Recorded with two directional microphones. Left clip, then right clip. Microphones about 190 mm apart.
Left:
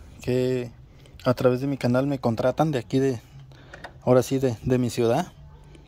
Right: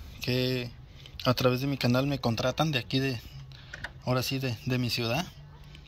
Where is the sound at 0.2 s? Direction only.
25° left (ahead or behind).